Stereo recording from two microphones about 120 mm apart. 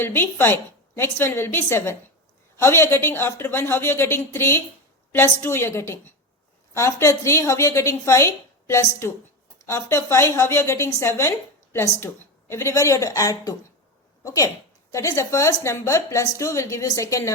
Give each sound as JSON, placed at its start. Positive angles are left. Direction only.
{"t": 0.0, "sound": "a woman's voice", "side_deg": 20}